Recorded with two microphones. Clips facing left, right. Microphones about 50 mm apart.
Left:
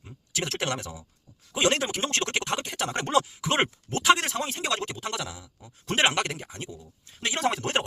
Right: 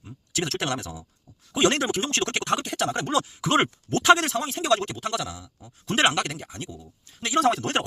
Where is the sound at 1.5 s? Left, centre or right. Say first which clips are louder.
Right 3 dB; centre.